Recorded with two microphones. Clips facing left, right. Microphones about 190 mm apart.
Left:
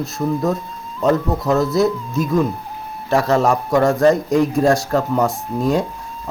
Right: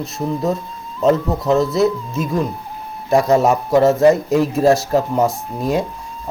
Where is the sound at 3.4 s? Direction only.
5° right (ahead or behind).